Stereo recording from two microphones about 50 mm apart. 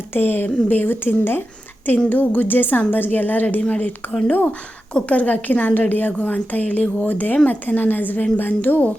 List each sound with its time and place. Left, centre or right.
0.1 s speech: left
2.0 s a woman's voice: left
4.9 s a woman's voice: left